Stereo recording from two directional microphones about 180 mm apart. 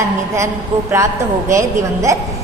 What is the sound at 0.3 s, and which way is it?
A woman's voice, 15° right (ahead or behind).